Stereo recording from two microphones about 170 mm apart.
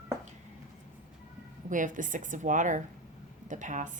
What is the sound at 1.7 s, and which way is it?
A woman's voice, 50° right (ahead or behind).